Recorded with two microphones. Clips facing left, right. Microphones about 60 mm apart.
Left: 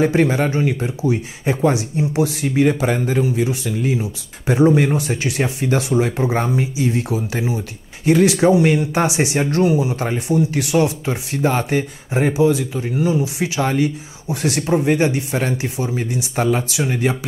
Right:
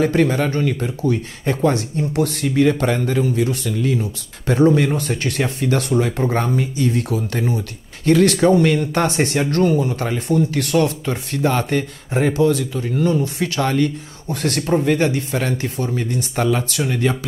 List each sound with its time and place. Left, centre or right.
0.0 s a man's voice: centre
13.0 s speech: centre